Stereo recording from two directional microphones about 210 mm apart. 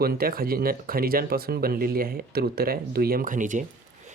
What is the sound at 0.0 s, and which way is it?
Speech, 45° right (ahead or behind).